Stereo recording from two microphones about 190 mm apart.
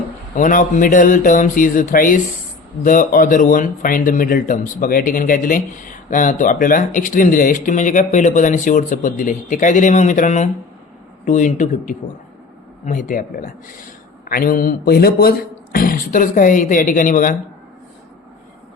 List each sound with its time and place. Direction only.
0.3 s speech: 45° left (ahead or behind)